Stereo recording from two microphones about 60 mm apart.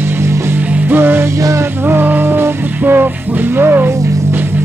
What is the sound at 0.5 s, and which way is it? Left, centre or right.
Music, right.